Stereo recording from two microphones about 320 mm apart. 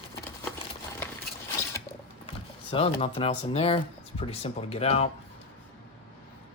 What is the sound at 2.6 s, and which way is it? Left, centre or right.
Speech, centre.